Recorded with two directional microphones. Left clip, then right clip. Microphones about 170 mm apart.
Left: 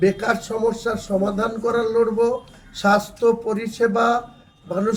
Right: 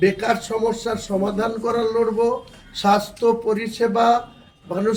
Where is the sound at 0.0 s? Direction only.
5° left (ahead or behind).